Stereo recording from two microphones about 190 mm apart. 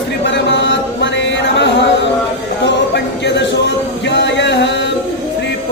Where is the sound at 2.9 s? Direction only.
65° left (ahead or behind).